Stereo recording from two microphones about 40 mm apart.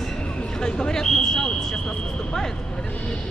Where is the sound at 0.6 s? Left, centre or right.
Centre.